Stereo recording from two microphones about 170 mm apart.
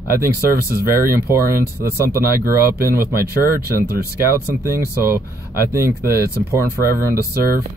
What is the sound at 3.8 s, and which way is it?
Speech, 65° right (ahead or behind).